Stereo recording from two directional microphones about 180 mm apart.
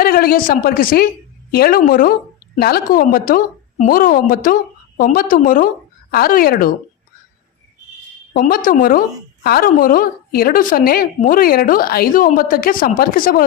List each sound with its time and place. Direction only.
0.0 s a woman's voice: 55° left (ahead or behind)
8.3 s a woman's voice: 50° left (ahead or behind)